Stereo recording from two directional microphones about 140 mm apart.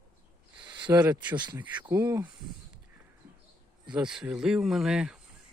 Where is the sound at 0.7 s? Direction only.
35° right (ahead or behind).